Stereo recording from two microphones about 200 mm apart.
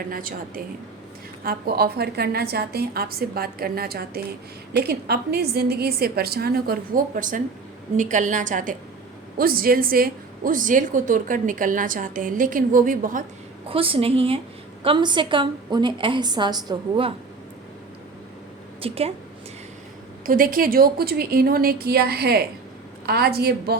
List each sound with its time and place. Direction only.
0.1 s a woman's voice: 45° right (ahead or behind)
13.7 s a woman's voice: 25° right (ahead or behind)
18.8 s a woman's voice: 30° right (ahead or behind)
20.2 s a woman's voice: 45° right (ahead or behind)